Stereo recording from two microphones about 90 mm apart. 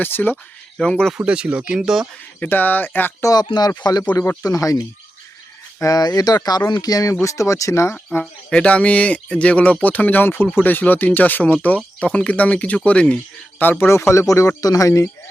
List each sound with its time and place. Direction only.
0.0 s speech: 20° left (ahead or behind)
0.8 s speech: 5° left (ahead or behind)
1.1 s speech: 15° right (ahead or behind)
2.4 s speech: 20° left (ahead or behind)
3.2 s a man's voice: 40° left (ahead or behind)
4.4 s a man's voice: 40° left (ahead or behind)
5.8 s a man's voice: 45° left (ahead or behind)
8.2 s a man's voice: 10° left (ahead or behind); by 15.1 s 35° left (ahead or behind)